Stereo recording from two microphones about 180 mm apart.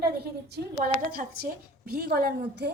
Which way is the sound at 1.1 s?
55° right (ahead or behind).